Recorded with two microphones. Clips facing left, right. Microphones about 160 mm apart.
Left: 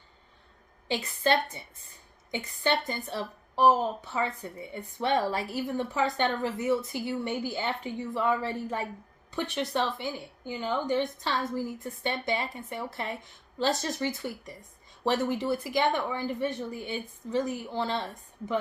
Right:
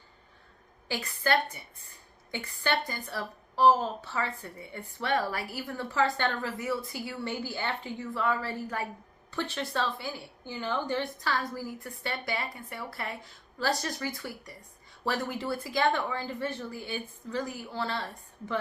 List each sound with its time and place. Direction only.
0.9 s a woman's voice: 25° left (ahead or behind)